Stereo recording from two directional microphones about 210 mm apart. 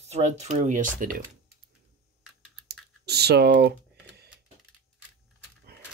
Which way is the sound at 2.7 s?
50° right (ahead or behind).